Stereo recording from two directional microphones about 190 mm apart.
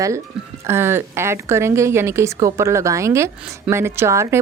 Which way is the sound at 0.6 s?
10° right (ahead or behind).